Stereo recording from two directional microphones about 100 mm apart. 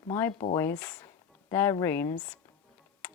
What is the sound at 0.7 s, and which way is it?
Speech, 15° left (ahead or behind).